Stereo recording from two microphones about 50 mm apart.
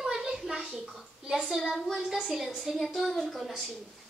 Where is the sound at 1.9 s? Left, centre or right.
Centre.